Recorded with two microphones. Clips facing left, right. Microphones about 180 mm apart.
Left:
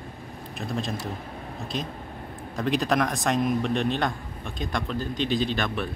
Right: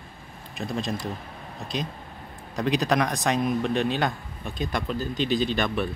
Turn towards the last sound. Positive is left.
turn(degrees=0)  # may be behind; listen again after turning